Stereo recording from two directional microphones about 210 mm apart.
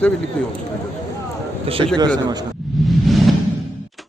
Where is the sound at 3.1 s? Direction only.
Centre (ahead or behind).